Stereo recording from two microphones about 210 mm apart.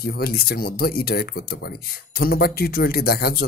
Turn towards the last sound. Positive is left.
turn(degrees=45)  # may be behind; listen again after turning